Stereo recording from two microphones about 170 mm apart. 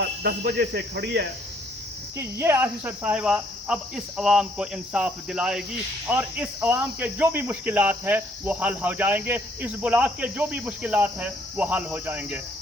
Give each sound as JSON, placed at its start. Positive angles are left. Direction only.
{"t": 0.2, "sound": "speech", "side_deg": -70}
{"t": 2.1, "sound": "cricket", "side_deg": -15}